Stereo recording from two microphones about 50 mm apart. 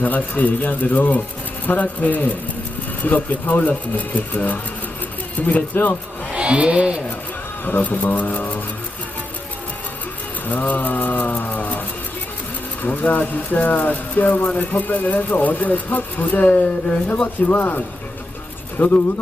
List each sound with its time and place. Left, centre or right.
0.0 s speech: left
6.3 s speech: right
7.6 s speech: left
10.4 s speech: left
12.8 s speech: left
17.5 s speech: left